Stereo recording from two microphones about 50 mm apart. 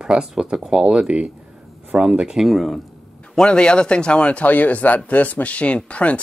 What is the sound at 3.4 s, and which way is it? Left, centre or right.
Speech, centre.